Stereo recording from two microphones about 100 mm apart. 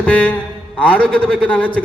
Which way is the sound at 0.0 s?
10° left (ahead or behind).